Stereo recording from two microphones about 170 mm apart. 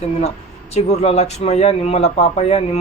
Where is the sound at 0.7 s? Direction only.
40° left (ahead or behind).